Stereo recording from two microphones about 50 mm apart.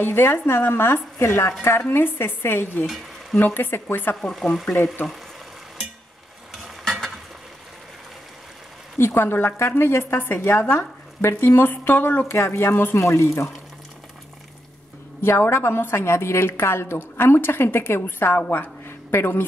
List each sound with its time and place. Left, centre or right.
0.0 s a woman's voice: left
1.8 s a woman's voice: left
4.2 s speech: centre
6.8 s a sound: centre
8.9 s a woman's voice: left
12.3 s a woman's voice: left
12.9 s speech: left
15.2 s a woman's voice: left
18.5 s a sound: left